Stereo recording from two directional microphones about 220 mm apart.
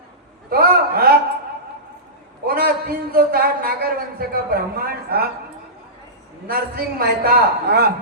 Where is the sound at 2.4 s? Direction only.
45° right (ahead or behind).